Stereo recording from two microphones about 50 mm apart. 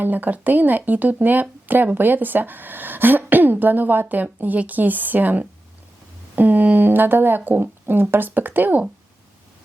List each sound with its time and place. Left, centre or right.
0.0 s speech: right